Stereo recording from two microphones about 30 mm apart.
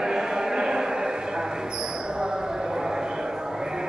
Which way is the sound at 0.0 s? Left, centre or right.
Right.